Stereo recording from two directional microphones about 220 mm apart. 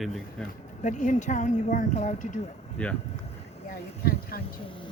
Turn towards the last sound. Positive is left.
turn(degrees=45)  # may be behind; listen again after turning